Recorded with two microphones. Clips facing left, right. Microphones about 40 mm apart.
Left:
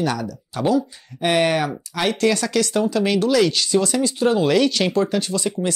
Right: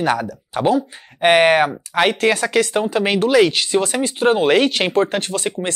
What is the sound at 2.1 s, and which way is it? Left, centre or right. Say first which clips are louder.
Speech: right 3 dB; right.